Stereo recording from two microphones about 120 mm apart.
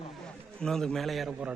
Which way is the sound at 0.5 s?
5° left (ahead or behind).